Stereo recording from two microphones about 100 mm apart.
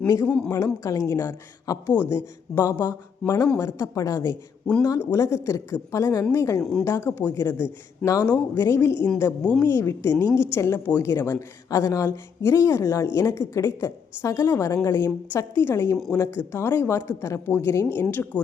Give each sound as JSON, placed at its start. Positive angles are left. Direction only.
{"t": 0.3, "sound": "speech", "side_deg": 15}
{"t": 0.5, "sound": "a woman's voice", "side_deg": 35}
{"t": 6.6, "sound": "speech", "side_deg": 5}
{"t": 6.8, "sound": "a woman's voice", "side_deg": 25}
{"t": 9.4, "sound": "speech", "side_deg": 10}
{"t": 9.6, "sound": "a woman's voice", "side_deg": 25}